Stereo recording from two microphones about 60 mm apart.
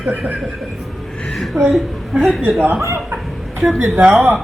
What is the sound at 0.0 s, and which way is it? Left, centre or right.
Speech, right.